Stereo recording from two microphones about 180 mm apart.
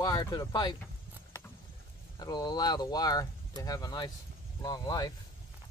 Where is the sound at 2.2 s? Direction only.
20° left (ahead or behind).